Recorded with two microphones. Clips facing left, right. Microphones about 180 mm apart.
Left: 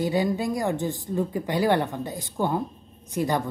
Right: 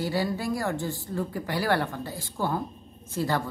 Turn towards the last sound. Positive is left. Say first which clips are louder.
# left 3 dB
turn(degrees=15)  # may be behind; listen again after turning